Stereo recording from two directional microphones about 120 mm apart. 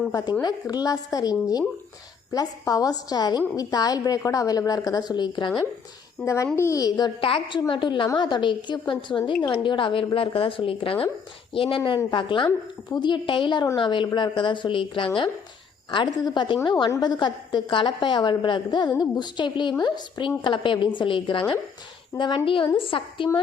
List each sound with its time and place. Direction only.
0.1 s a woman's voice: 35° left (ahead or behind)
6.2 s a woman's voice: 25° left (ahead or behind)
7.2 s a woman's voice: 45° left (ahead or behind)
22.1 s a woman's voice: 25° left (ahead or behind)
22.4 s a woman's voice: 45° left (ahead or behind)